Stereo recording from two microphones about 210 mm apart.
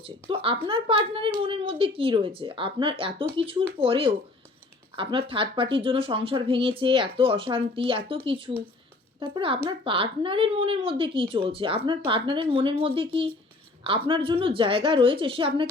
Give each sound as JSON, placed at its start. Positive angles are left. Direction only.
{"t": 0.0, "sound": "speech", "side_deg": -25}